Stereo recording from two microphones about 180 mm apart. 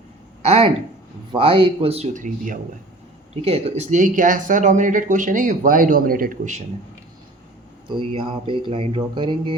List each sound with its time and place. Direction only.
0.4 s speech: 35° right (ahead or behind)
7.9 s speech: 30° right (ahead or behind)